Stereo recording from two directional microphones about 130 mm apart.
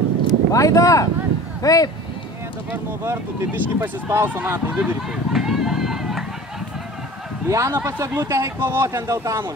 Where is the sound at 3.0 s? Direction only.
20° right (ahead or behind).